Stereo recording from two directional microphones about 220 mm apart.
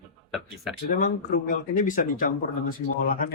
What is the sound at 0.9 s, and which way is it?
Speech, 35° left (ahead or behind).